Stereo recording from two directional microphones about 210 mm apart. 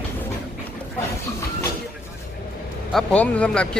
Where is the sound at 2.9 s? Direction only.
5° left (ahead or behind).